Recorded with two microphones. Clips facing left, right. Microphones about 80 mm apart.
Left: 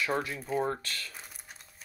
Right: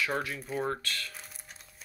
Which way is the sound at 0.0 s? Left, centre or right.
Left.